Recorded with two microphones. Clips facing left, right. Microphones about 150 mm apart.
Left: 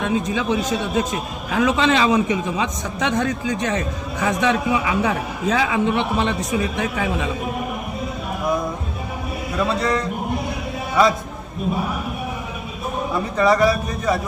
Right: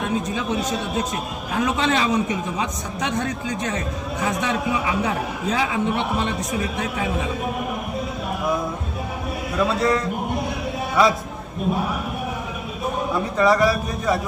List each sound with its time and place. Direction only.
0.5 s a man's voice: centre (ahead or behind)
1.5 s a man's voice: 90° left
3.2 s a man's voice: centre (ahead or behind)
4.2 s a man's voice: 90° left
6.5 s a man's voice: centre (ahead or behind)
9.6 s a man's voice: centre (ahead or behind)
13.1 s a man's voice: centre (ahead or behind)